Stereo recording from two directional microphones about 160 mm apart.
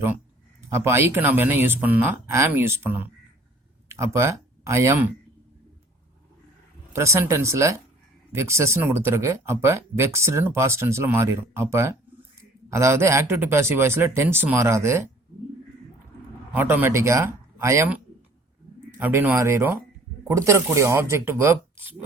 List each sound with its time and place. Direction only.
0.7 s speech: 15° right (ahead or behind)
6.9 s speech: 15° right (ahead or behind)
16.5 s speech: 10° right (ahead or behind)